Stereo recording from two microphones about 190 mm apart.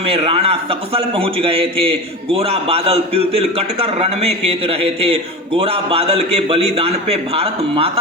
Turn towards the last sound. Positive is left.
turn(degrees=-30)  # may be behind; listen again after turning